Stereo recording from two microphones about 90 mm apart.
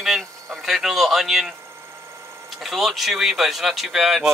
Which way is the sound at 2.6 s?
Centre (ahead or behind).